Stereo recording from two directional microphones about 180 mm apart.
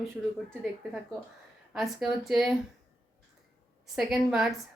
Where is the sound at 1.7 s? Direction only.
Centre (ahead or behind).